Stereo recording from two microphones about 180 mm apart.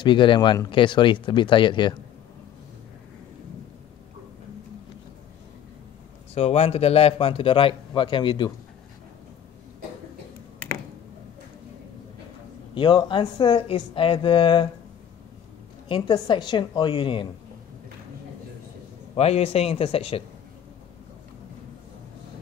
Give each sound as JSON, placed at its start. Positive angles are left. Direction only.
{"t": 0.0, "sound": "speech", "side_deg": 25}
{"t": 6.3, "sound": "a man's voice", "side_deg": 35}
{"t": 12.7, "sound": "speech", "side_deg": 25}
{"t": 15.9, "sound": "speech", "side_deg": 25}
{"t": 19.1, "sound": "a man's voice", "side_deg": 35}